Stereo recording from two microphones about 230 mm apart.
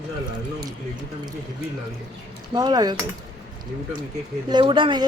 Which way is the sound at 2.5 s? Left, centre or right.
Centre.